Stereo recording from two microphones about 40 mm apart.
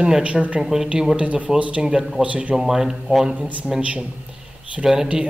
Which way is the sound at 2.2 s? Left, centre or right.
Right.